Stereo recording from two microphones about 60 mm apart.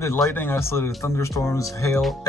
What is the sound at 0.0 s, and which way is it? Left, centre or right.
Speech, left.